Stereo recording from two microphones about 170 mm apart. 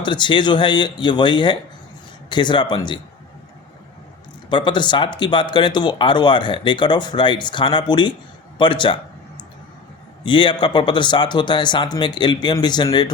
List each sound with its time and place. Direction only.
0.0 s speech: 25° left (ahead or behind)
4.4 s a man's voice: 25° left (ahead or behind)
10.2 s speech: 30° left (ahead or behind)